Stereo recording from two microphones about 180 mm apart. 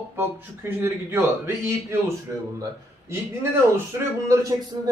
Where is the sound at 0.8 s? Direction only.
15° right (ahead or behind).